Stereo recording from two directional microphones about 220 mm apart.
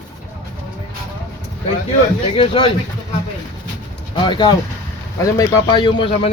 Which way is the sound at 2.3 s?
25° left (ahead or behind).